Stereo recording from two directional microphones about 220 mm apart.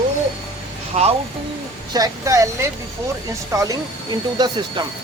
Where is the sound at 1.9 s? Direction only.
15° right (ahead or behind).